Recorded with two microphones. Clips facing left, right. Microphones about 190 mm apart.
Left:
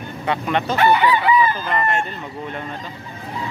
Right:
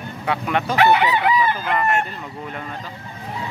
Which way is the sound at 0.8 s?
70° right (ahead or behind).